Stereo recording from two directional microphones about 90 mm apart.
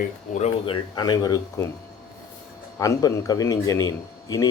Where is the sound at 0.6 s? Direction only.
65° left (ahead or behind); by 1.4 s 50° left (ahead or behind).